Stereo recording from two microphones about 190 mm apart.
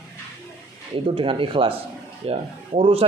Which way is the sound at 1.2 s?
30° right (ahead or behind).